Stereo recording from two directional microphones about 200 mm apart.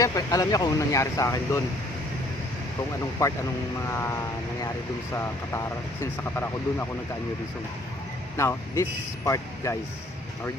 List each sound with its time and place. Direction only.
0.0 s speech: 15° left (ahead or behind)
3.8 s speech: 15° left (ahead or behind)
8.4 s speech: 15° left (ahead or behind)